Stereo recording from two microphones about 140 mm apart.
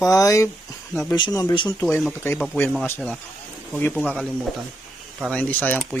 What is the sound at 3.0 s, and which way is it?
Speech, centre (ahead or behind).